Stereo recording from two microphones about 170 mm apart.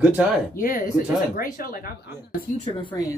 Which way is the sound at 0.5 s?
55° left (ahead or behind).